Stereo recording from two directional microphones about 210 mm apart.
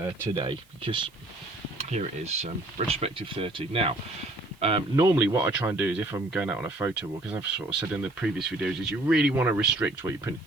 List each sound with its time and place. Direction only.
0.0 s speech: 25° right (ahead or behind)
4.9 s speech: 15° right (ahead or behind)